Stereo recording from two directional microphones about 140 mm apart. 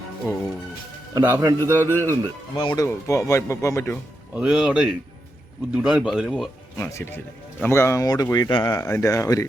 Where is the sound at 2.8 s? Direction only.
20° left (ahead or behind).